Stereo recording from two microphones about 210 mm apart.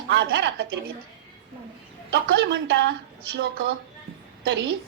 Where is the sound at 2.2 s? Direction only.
55° right (ahead or behind).